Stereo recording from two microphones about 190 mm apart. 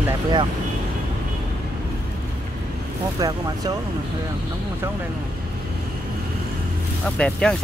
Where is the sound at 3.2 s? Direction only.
20° right (ahead or behind).